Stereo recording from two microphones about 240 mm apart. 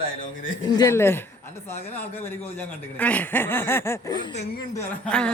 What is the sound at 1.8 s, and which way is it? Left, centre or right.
Speech, left.